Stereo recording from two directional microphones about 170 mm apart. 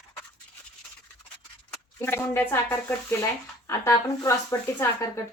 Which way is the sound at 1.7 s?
15° left (ahead or behind).